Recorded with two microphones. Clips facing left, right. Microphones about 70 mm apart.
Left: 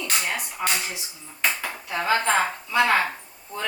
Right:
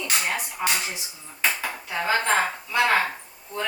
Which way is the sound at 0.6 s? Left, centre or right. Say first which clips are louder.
Even; centre.